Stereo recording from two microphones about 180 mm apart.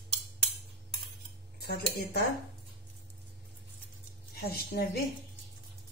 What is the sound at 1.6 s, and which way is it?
Speech, 65° left (ahead or behind).